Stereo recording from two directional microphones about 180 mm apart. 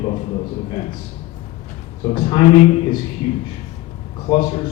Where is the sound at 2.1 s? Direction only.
25° left (ahead or behind).